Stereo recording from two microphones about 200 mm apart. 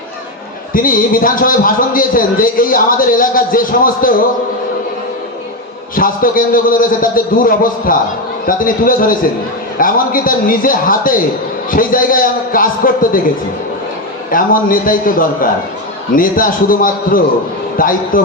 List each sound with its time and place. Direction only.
0.7 s a man's voice: 45° left (ahead or behind)
5.9 s a man's voice: 45° left (ahead or behind)
14.3 s a man's voice: 45° left (ahead or behind)